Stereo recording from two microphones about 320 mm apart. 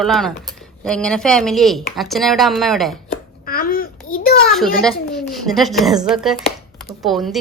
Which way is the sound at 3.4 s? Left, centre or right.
Left.